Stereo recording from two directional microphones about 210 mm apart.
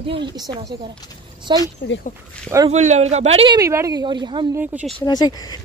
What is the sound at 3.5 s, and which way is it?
Speech, 15° right (ahead or behind).